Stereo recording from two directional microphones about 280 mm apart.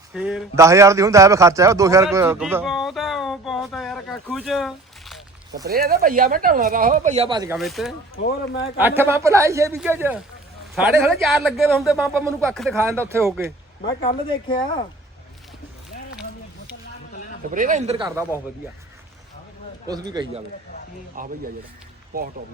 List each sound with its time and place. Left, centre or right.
0.1 s a man's voice: centre
5.6 s speech: right; by 7.6 s centre
7.6 s speech: centre
8.2 s speech: left
8.8 s a man's voice: centre
14.0 s speech: centre
17.5 s speech: right
19.9 s a man's voice: centre
21.2 s speech: right